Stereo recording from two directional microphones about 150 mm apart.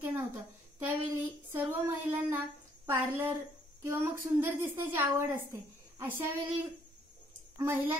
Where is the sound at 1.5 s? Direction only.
15° right (ahead or behind).